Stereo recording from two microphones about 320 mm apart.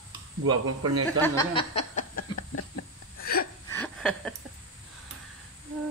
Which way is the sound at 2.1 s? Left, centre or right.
Left.